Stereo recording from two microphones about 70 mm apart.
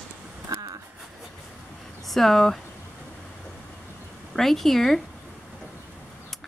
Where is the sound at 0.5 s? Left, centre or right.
Right.